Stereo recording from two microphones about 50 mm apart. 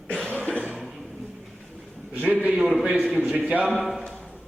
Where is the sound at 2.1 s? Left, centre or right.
Right.